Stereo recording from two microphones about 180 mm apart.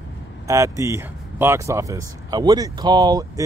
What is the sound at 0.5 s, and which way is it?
Speech, 15° right (ahead or behind).